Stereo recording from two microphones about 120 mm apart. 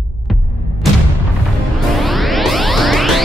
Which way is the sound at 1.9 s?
Centre (ahead or behind).